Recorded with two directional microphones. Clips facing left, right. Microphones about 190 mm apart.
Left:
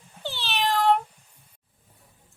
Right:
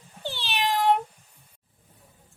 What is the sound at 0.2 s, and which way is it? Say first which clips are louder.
Cat: left 1 dB; 15° right (ahead or behind).